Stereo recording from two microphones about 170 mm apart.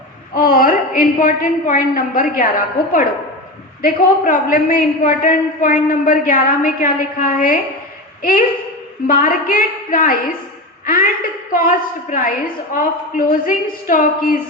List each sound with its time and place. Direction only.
0.3 s a woman's voice: 55° left (ahead or behind)
3.8 s a man's voice: 50° left (ahead or behind)